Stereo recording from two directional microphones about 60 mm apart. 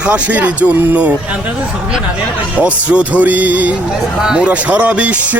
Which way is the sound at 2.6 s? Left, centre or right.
Right.